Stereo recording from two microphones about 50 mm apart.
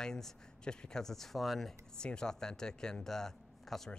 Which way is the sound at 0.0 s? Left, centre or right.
Centre.